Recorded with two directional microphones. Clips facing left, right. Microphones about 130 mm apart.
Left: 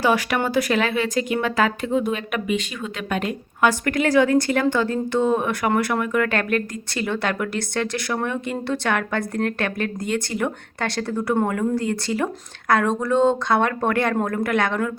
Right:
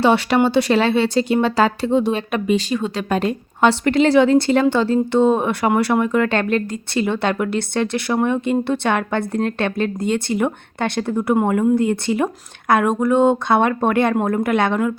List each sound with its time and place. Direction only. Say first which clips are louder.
0.0 s speech: right 5 dB; 30° right (ahead or behind)